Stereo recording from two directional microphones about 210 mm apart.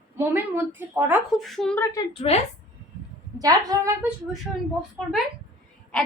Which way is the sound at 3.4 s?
15° right (ahead or behind).